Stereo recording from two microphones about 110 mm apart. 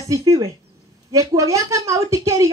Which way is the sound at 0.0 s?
30° right (ahead or behind).